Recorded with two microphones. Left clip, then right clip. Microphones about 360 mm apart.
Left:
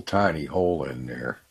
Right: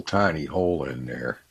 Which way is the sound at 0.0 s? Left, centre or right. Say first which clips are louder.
Even; left.